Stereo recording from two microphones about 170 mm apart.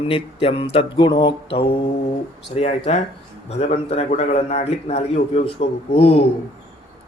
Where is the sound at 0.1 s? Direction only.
35° left (ahead or behind).